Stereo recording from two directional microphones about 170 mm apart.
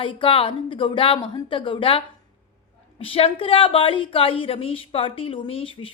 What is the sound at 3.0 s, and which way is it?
A woman's voice, 35° left (ahead or behind).